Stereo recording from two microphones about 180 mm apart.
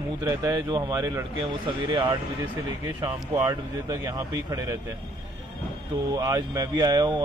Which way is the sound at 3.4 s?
15° right (ahead or behind).